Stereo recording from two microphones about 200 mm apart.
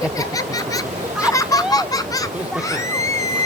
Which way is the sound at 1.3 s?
15° left (ahead or behind).